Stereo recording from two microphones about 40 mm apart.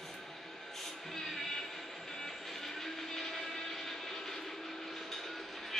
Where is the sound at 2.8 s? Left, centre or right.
Centre.